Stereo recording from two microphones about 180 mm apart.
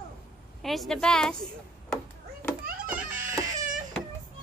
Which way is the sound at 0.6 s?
Centre (ahead or behind).